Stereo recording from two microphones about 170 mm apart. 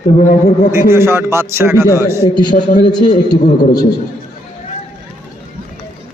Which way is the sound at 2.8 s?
25° left (ahead or behind).